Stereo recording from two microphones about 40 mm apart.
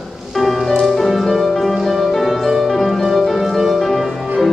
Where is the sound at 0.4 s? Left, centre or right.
Centre.